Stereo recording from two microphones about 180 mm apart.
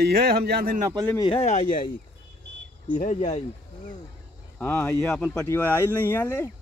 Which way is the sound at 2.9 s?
45° left (ahead or behind).